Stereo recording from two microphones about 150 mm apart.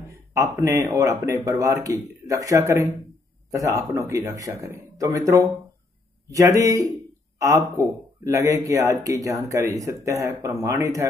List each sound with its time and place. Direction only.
0.3 s speech: 20° right (ahead or behind)
7.3 s speech: 20° right (ahead or behind)